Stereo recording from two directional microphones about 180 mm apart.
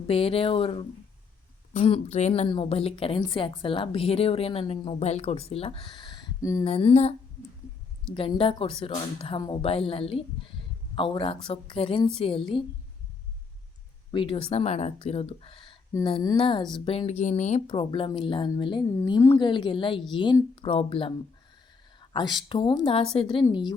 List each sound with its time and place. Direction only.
0.1 s a woman's voice: 30° left (ahead or behind)
6.7 s speech: 35° left (ahead or behind)
8.1 s a woman's voice: 30° left (ahead or behind)
14.1 s a woman's voice: 30° left (ahead or behind)
17.7 s a woman's voice: 30° left (ahead or behind)